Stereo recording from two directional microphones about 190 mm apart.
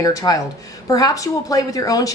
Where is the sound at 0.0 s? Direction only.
20° left (ahead or behind).